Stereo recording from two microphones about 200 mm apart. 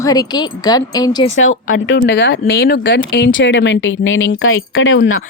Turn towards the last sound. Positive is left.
turn(degrees=80)